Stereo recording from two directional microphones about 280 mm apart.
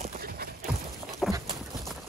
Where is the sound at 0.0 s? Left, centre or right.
Right.